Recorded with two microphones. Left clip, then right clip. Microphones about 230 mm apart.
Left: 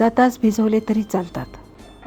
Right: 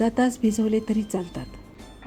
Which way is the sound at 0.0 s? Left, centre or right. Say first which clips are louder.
Left 7 dB; centre.